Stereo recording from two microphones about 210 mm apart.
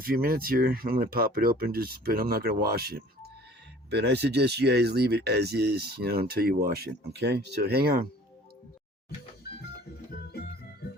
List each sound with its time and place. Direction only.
0.0 s speech: 45° right (ahead or behind)
10.1 s music: 50° left (ahead or behind)